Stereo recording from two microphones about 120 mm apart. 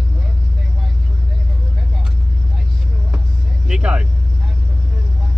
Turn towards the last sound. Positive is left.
turn(degrees=-10)  # may be behind; listen again after turning